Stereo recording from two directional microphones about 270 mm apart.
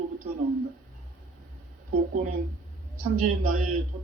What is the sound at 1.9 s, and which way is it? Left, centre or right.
A man's voice, right.